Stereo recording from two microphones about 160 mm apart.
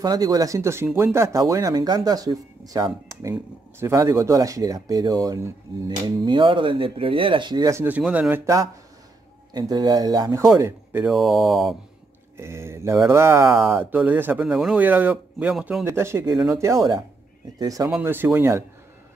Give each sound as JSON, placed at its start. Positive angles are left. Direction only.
{"t": 0.0, "sound": "speech", "side_deg": -25}
{"t": 7.8, "sound": "speech", "side_deg": -10}
{"t": 9.5, "sound": "speech", "side_deg": -25}
{"t": 11.1, "sound": "speech", "side_deg": 0}
{"t": 12.4, "sound": "speech", "side_deg": -15}
{"t": 15.8, "sound": "speech", "side_deg": -15}
{"t": 17.8, "sound": "speech", "side_deg": -10}